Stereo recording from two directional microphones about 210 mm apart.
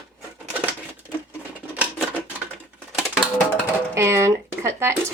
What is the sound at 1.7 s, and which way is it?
Typewriter, 5° right (ahead or behind).